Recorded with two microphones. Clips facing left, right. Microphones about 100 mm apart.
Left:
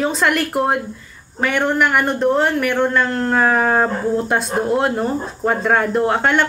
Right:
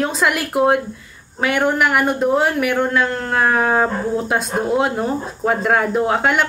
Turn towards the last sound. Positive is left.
turn(degrees=-5)  # may be behind; listen again after turning